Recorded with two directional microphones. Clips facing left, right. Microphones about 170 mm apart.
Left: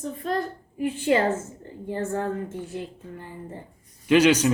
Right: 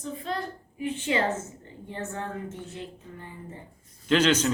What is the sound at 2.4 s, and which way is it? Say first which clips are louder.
Speech: left 5 dB; 10° left (ahead or behind).